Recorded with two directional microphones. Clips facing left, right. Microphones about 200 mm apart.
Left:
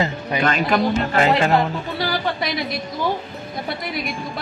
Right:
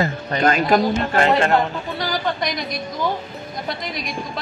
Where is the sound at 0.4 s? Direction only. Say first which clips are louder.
Right 3 dB; 40° right (ahead or behind).